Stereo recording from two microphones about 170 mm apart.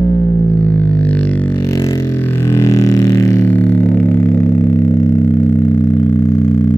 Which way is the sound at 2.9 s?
20° left (ahead or behind).